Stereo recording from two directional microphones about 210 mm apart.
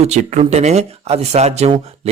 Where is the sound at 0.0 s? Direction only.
35° right (ahead or behind).